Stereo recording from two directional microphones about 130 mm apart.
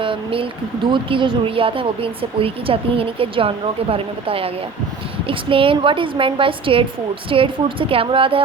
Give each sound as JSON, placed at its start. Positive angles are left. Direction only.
{"t": 0.0, "sound": "a woman's voice", "side_deg": -45}